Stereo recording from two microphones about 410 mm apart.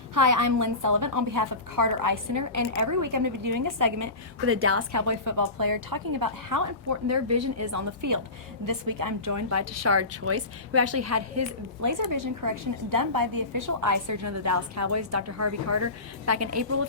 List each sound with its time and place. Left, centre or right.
0.1 s a woman's voice: right
4.4 s a woman's voice: right
4.9 s a woman's voice: right